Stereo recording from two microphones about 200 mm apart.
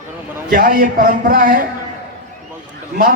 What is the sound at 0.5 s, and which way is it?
A man's voice, 45° right (ahead or behind).